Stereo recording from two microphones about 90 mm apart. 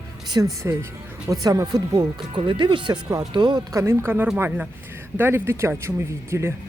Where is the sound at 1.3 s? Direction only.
45° right (ahead or behind).